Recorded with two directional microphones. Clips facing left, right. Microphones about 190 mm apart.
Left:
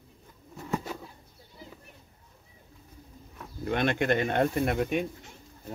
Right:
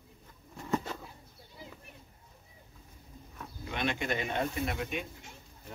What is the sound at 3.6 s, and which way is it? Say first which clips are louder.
Speech: left 7 dB; 55° left (ahead or behind).